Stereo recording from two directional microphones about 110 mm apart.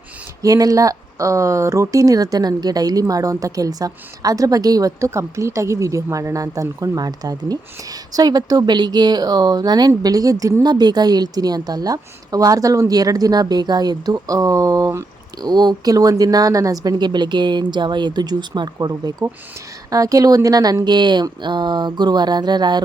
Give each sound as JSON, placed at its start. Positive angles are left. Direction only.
{"t": 0.4, "sound": "speech", "side_deg": -35}
{"t": 19.2, "sound": "speech", "side_deg": -30}